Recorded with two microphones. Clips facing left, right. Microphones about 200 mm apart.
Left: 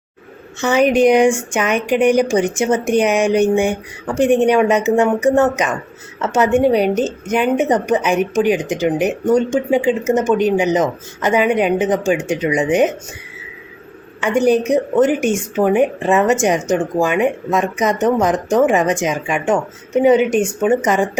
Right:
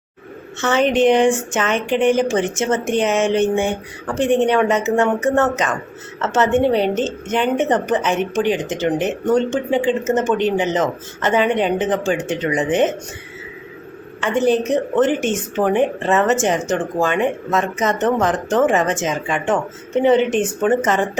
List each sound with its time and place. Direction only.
0.6 s a woman's voice: 15° left (ahead or behind)
14.2 s a woman's voice: 15° left (ahead or behind)